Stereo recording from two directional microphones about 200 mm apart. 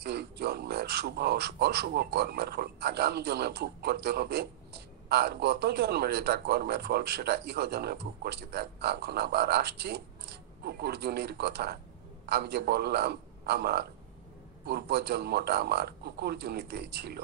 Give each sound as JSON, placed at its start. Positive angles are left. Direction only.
{"t": 0.0, "sound": "a man's voice", "side_deg": -55}